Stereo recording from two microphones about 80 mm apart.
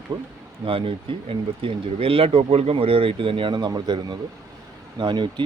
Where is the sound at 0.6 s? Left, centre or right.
Right.